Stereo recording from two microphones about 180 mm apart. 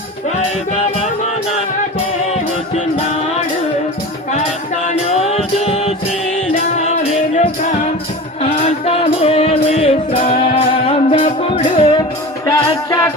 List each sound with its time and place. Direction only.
4.9 s music: 35° left (ahead or behind)
8.9 s music: 35° left (ahead or behind)
12.5 s music: 15° left (ahead or behind)